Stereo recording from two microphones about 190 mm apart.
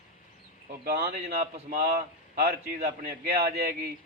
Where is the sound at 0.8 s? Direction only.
55° right (ahead or behind).